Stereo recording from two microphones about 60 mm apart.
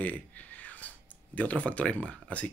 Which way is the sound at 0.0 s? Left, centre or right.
Left.